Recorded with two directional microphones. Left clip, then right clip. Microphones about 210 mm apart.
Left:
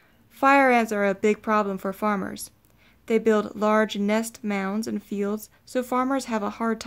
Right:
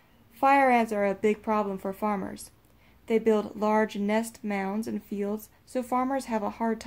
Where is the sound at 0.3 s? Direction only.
35° left (ahead or behind).